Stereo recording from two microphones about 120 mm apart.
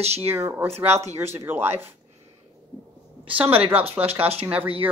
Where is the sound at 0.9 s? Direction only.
65° right (ahead or behind).